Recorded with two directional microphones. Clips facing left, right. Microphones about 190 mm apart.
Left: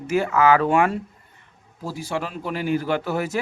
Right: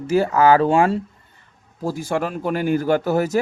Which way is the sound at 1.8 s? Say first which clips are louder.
Right 5 dB; 50° right (ahead or behind).